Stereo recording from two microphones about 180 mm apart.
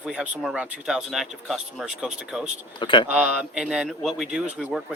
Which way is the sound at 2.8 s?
25° left (ahead or behind).